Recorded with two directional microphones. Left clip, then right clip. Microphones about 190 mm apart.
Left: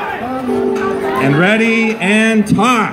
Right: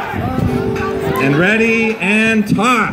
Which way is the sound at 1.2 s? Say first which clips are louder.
Even; 20° left (ahead or behind).